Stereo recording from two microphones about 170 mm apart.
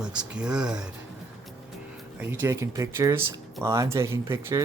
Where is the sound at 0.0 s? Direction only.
5° right (ahead or behind).